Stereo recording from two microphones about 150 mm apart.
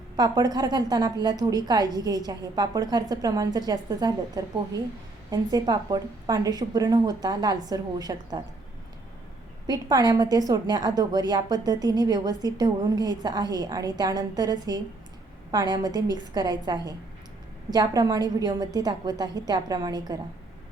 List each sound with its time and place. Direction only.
0.2 s a woman's voice: 25° right (ahead or behind)
9.6 s a woman's voice: 25° right (ahead or behind)